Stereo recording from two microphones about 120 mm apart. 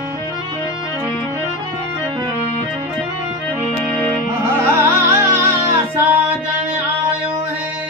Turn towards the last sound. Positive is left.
turn(degrees=-15)  # may be behind; listen again after turning